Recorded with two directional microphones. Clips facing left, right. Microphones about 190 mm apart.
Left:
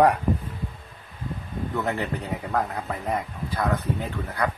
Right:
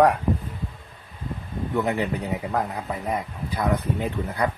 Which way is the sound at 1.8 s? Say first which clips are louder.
Right 4 dB; 15° right (ahead or behind).